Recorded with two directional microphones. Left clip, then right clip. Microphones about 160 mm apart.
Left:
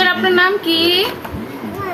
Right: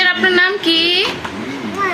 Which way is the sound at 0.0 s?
25° right (ahead or behind).